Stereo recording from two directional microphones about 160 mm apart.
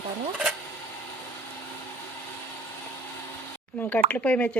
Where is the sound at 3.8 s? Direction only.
10° left (ahead or behind).